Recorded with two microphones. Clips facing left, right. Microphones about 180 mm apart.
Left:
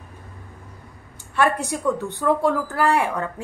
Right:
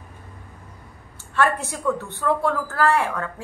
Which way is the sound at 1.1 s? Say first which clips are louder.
Left 1 dB; 15° left (ahead or behind).